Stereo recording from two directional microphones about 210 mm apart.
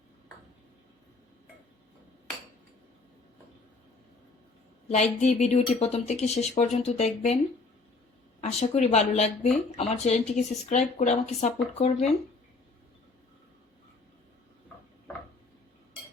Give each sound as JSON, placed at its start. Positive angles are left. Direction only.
{"t": 4.9, "sound": "speech", "side_deg": 30}
{"t": 8.4, "sound": "speech", "side_deg": 30}